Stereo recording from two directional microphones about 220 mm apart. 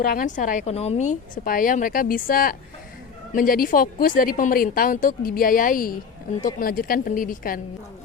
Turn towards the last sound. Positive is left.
turn(degrees=40)  # may be behind; listen again after turning